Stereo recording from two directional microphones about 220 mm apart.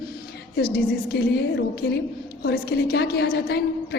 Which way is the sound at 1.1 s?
45° left (ahead or behind).